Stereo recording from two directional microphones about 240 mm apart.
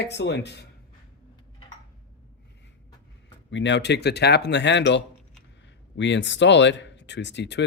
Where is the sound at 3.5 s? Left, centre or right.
Left.